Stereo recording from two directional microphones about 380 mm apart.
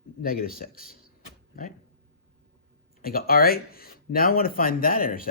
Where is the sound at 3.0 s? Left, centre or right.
Left.